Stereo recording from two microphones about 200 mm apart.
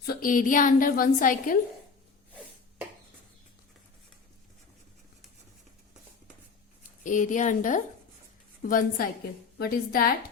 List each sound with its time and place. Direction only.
0.0 s a woman's voice: 45° left (ahead or behind)
7.0 s a woman's voice: 40° left (ahead or behind)